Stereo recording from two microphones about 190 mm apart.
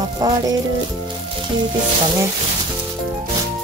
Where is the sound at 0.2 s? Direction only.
20° right (ahead or behind).